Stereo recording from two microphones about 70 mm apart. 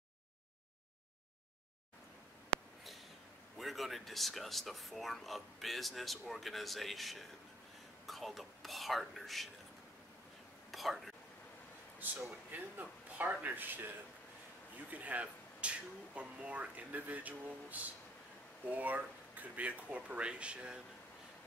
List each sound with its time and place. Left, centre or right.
3.5 s speech: centre
10.7 s speech: centre
12.4 s speech: right